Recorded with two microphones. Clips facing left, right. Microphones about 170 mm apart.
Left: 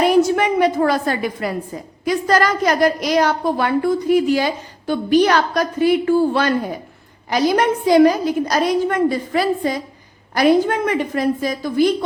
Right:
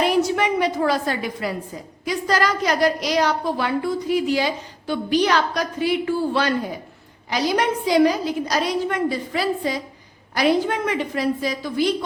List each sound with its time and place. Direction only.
0.0 s a woman's voice: 50° left (ahead or behind)